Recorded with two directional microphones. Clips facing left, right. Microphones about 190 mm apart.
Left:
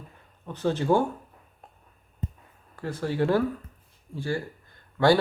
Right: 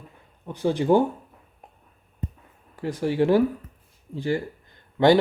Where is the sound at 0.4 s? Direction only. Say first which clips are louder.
Right 3 dB; 15° right (ahead or behind).